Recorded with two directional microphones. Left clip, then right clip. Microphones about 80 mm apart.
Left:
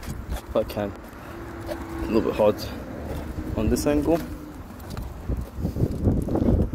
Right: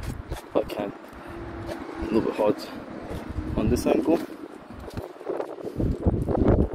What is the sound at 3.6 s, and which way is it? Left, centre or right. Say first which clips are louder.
Speech: even; right.